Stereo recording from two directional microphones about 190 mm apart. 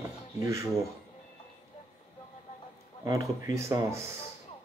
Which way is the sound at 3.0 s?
15° right (ahead or behind).